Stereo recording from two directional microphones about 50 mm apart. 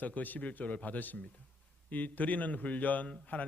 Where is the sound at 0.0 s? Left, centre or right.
Left.